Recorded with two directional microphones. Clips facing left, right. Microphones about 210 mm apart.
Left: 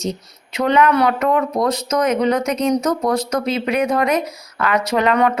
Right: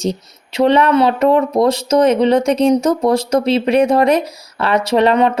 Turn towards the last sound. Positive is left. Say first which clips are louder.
# right 4 dB
turn(degrees=-30)  # may be behind; listen again after turning